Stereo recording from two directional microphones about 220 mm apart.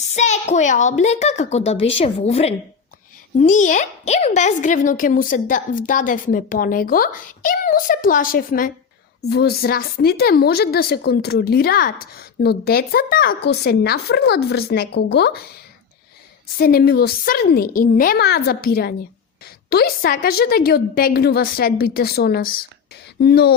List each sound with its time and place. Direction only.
0.1 s a woman's voice: 30° left (ahead or behind); by 15.4 s 50° left (ahead or behind)
16.6 s speech: 45° left (ahead or behind)